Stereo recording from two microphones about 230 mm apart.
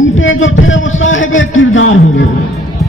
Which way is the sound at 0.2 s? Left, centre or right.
Left.